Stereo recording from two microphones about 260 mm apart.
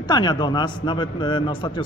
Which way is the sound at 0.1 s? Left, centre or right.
Centre.